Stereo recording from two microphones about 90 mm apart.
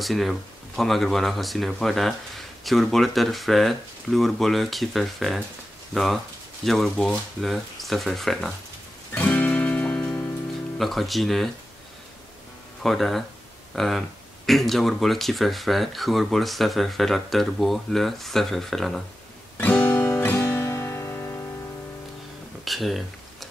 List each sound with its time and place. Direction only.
0.0 s speech: centre (ahead or behind)
9.1 s music: 15° left (ahead or behind)
10.8 s speech: centre (ahead or behind)
12.8 s speech: centre (ahead or behind)
19.5 s music: 20° left (ahead or behind)
22.7 s a sound: centre (ahead or behind)